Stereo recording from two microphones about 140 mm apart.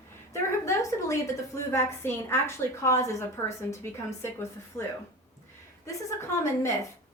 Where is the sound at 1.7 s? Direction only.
20° left (ahead or behind).